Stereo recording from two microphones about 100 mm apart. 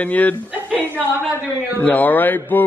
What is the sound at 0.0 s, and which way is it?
Speech, 15° left (ahead or behind).